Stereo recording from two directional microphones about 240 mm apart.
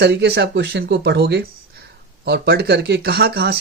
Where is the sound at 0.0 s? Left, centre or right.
Right.